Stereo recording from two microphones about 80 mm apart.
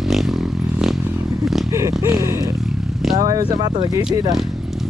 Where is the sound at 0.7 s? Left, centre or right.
Centre.